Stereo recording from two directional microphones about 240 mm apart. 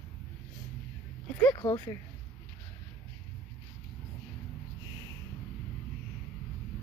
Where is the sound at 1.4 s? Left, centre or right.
Centre.